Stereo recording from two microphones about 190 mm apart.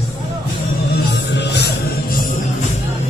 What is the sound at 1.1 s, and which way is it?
Music, 65° left (ahead or behind).